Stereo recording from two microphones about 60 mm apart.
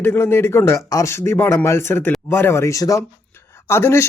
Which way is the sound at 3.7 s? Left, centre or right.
Left.